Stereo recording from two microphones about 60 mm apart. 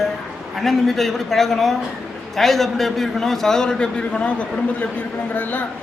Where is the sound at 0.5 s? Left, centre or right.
Centre.